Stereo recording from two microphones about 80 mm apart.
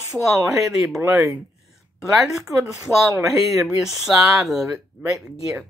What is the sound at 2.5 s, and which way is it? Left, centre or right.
Speech, right.